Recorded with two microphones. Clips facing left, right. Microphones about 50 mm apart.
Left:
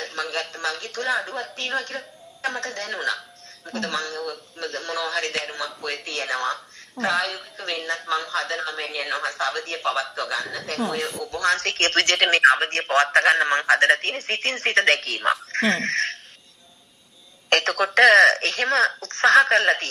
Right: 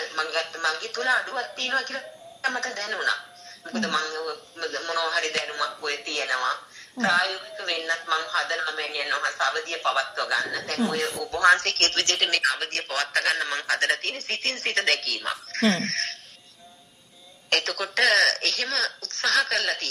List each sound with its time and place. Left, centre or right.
0.0 s a woman's voice: centre
12.0 s speech: left
12.5 s speech: left
13.3 s speech: centre
15.0 s speech: left
15.2 s speech: centre
17.5 s a sound: left
18.0 s speech: left
18.9 s a woman's voice: left